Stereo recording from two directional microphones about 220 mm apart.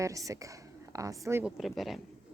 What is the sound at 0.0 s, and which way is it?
A woman's voice, 15° right (ahead or behind).